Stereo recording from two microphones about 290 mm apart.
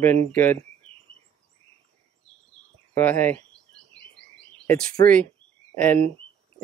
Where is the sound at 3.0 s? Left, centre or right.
Centre.